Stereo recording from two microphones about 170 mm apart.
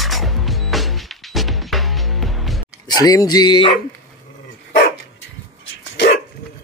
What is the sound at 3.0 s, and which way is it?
Music, 20° left (ahead or behind).